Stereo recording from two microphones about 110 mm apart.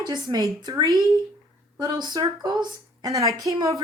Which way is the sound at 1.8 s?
35° right (ahead or behind).